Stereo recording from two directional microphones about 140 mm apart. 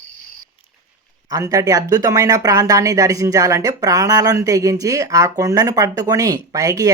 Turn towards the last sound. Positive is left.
turn(degrees=-25)  # may be behind; listen again after turning